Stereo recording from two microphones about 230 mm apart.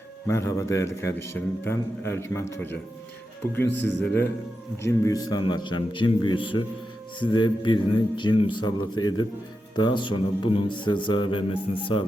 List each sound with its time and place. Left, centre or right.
0.3 s a man's voice: centre
8.8 s a man's voice: left
9.7 s speech: centre